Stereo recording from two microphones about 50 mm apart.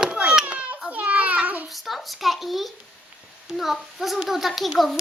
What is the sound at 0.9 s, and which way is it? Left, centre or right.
Child singing, right.